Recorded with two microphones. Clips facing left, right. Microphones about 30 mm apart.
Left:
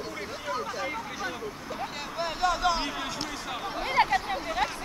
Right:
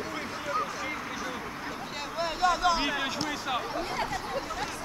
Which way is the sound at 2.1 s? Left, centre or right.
Centre.